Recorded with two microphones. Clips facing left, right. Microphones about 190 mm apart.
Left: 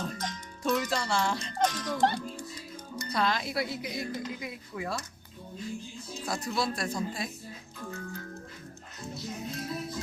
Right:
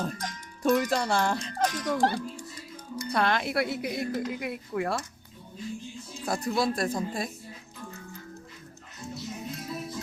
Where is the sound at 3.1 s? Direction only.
60° right (ahead or behind).